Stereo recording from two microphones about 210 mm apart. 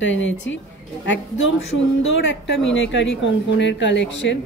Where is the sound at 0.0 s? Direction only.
60° left (ahead or behind).